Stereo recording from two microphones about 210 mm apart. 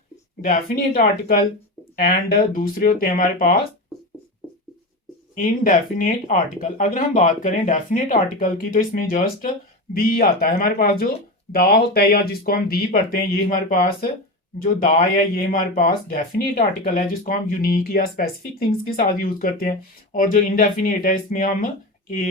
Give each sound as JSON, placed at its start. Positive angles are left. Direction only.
{"t": 0.4, "sound": "speech", "side_deg": 35}
{"t": 5.3, "sound": "speech", "side_deg": 40}
{"t": 15.4, "sound": "speech", "side_deg": 40}